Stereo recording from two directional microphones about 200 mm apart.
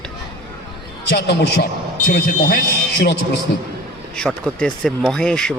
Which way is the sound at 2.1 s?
45° left (ahead or behind).